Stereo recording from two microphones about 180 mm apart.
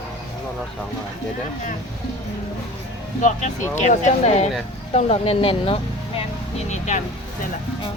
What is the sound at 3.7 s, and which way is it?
Speech, 40° left (ahead or behind).